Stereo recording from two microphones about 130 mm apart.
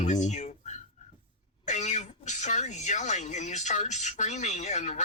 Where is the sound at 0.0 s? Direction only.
65° left (ahead or behind).